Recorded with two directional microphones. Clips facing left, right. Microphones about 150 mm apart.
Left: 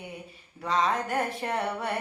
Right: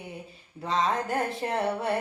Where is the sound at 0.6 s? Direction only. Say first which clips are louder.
Even; 25° right (ahead or behind).